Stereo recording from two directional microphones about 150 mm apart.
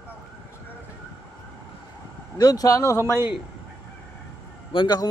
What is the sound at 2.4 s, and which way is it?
Speech, 25° left (ahead or behind).